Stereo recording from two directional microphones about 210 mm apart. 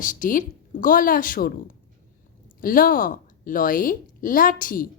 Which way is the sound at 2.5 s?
40° left (ahead or behind).